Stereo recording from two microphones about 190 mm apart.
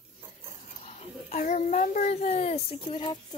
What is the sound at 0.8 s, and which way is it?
A child's voice, 40° left (ahead or behind).